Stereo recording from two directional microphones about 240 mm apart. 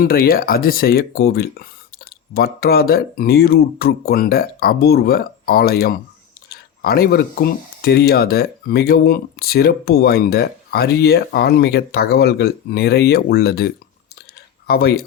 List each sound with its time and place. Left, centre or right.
0.0 s speech: left
14.7 s speech: left